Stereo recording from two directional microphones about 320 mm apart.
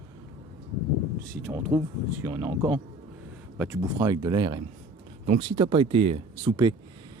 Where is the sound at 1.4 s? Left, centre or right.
Centre.